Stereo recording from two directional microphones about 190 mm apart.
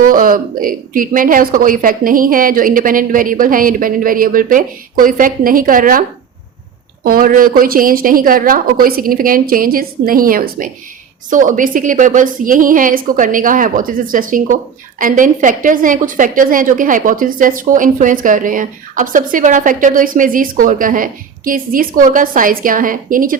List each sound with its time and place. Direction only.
0.0 s a woman's voice: 45° right (ahead or behind)